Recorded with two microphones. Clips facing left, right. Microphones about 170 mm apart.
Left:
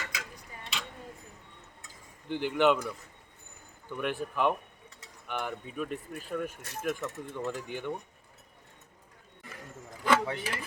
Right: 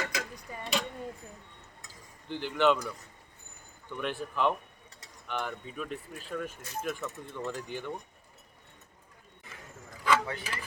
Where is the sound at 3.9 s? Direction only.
10° left (ahead or behind).